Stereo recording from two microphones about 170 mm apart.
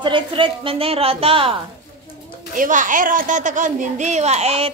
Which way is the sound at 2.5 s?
50° right (ahead or behind).